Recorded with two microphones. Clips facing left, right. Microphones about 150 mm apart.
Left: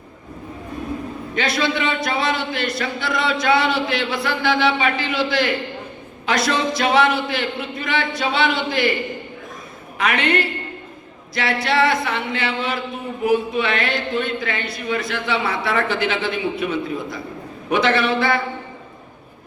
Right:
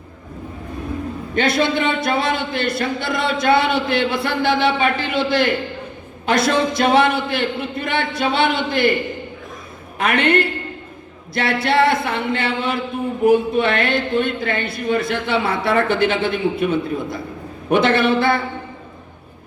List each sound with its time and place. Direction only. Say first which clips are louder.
1.4 s speech: right 3 dB; 55° right (ahead or behind)
10.0 s speech: right 3 dB; 55° right (ahead or behind)